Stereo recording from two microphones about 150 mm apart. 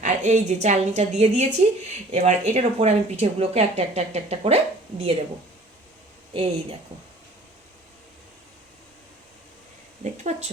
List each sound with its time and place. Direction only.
0.0 s speech: 50° right (ahead or behind)
6.3 s speech: 40° right (ahead or behind)
10.0 s speech: 50° right (ahead or behind)